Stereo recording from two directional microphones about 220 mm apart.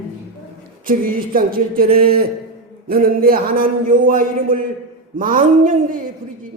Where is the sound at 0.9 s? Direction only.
40° right (ahead or behind).